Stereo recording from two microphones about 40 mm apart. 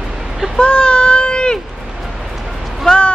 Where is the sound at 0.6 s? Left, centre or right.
Left.